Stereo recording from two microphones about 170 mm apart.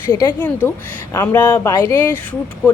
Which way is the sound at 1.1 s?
15° left (ahead or behind).